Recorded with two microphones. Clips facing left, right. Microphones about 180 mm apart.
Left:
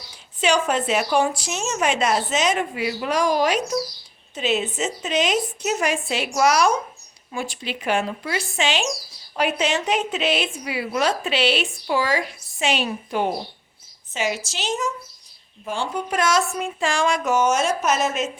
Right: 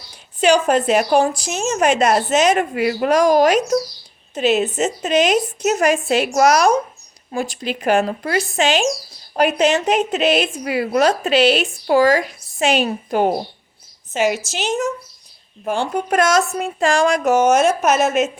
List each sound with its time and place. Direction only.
0.5 s a woman's voice: 50° right (ahead or behind)
2.0 s a woman's voice: 60° right (ahead or behind); by 3.8 s 45° right (ahead or behind)
4.4 s a woman's voice: 65° right (ahead or behind)